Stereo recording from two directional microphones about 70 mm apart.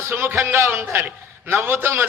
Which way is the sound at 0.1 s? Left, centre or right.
Right.